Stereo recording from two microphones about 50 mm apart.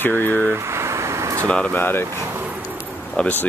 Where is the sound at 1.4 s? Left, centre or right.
Centre.